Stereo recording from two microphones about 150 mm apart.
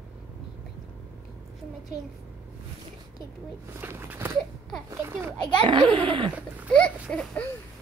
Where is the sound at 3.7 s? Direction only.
15° right (ahead or behind).